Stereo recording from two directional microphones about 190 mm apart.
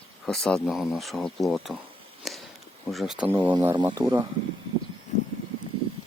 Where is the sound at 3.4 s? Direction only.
25° right (ahead or behind).